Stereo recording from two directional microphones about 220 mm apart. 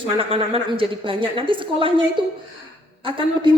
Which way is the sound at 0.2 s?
25° right (ahead or behind).